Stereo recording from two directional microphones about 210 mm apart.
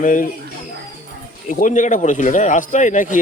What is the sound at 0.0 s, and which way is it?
Speech, 40° left (ahead or behind).